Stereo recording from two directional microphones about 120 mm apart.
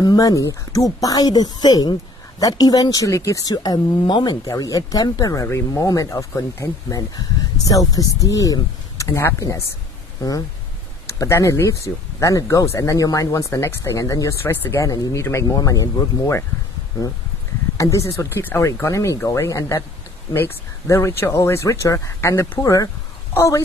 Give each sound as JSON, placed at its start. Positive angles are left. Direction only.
{"t": 0.0, "sound": "speech", "side_deg": 30}
{"t": 11.1, "sound": "speech", "side_deg": 25}
{"t": 17.7, "sound": "speech", "side_deg": 25}